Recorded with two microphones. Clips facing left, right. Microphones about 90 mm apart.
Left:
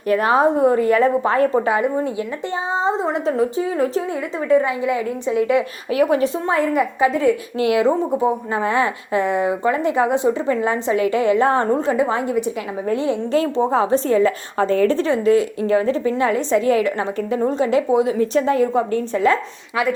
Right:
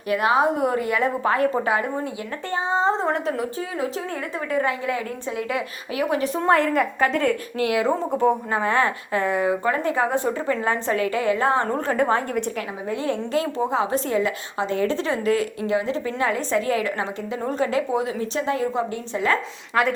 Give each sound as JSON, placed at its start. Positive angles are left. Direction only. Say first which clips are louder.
{"t": 0.1, "sound": "a woman's voice", "louder": "left 4 dB", "side_deg": 40}
{"t": 2.7, "sound": "a woman's voice", "louder": "left 1 dB", "side_deg": 15}
{"t": 4.4, "sound": "a woman's voice", "louder": "left 7 dB", "side_deg": 20}
{"t": 6.4, "sound": "a woman's voice", "louder": "even", "side_deg": 5}
{"t": 7.6, "sound": "a woman's voice", "louder": "left 5 dB", "side_deg": 25}
{"t": 11.9, "sound": "a woman's voice", "louder": "left 2 dB", "side_deg": 15}
{"t": 13.3, "sound": "a woman's voice", "louder": "left 6 dB", "side_deg": 35}
{"t": 15.0, "sound": "a woman's voice", "louder": "left 6 dB", "side_deg": 30}